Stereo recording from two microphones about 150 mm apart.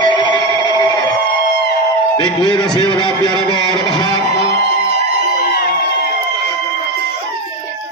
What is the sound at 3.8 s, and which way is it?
Guitar, 30° left (ahead or behind).